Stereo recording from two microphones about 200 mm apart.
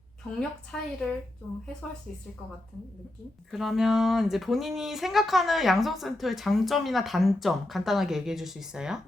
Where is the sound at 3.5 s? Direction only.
Centre (ahead or behind).